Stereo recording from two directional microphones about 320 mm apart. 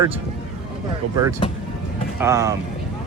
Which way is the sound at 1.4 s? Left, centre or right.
Centre.